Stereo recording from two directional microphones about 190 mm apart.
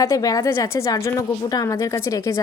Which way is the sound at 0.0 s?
15° left (ahead or behind).